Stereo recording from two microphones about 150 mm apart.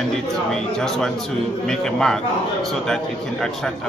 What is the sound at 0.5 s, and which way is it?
A man's voice, 5° left (ahead or behind).